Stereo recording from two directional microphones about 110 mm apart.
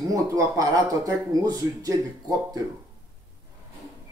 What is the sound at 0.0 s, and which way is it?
Speech, 30° right (ahead or behind).